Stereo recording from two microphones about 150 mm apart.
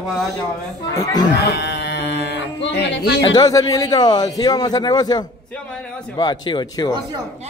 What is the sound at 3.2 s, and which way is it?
A man's voice, 25° left (ahead or behind).